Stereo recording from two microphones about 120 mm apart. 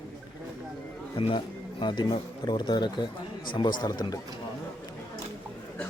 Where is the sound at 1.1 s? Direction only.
45° left (ahead or behind).